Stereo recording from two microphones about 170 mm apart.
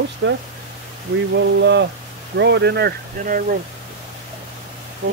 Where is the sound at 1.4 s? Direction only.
90° right; by 3.4 s 65° right (ahead or behind).